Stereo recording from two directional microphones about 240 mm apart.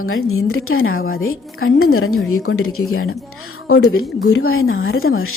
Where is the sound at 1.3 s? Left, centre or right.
Left.